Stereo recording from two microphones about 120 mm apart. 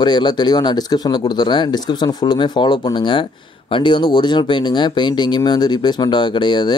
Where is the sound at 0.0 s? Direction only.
40° left (ahead or behind).